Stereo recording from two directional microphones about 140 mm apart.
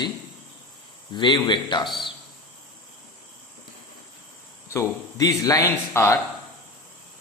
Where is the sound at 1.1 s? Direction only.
35° left (ahead or behind).